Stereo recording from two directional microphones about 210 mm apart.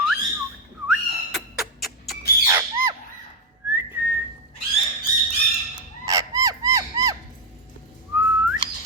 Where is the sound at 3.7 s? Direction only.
10° right (ahead or behind).